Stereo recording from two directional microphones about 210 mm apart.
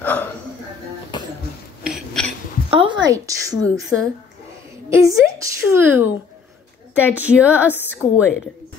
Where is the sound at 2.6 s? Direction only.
25° right (ahead or behind).